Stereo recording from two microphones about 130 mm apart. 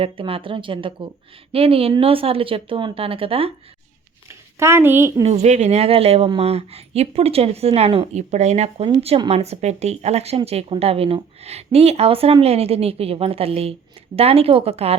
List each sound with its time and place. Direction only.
0.0 s a woman's voice: 45° right (ahead or behind)
4.3 s a woman's voice: 20° right (ahead or behind)
5.2 s a woman's voice: 55° right (ahead or behind)